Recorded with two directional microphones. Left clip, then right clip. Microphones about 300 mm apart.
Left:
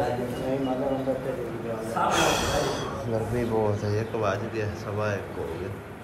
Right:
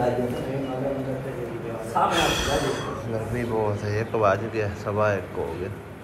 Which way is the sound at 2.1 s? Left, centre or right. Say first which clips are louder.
Right 1 dB; left.